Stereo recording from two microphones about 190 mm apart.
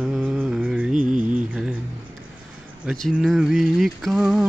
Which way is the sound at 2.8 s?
Centre (ahead or behind).